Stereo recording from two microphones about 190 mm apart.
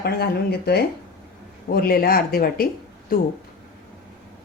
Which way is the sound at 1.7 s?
50° left (ahead or behind).